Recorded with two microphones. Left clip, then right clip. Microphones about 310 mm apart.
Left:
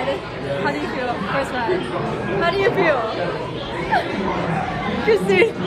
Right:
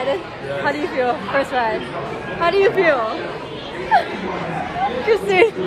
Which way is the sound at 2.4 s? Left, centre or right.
Right.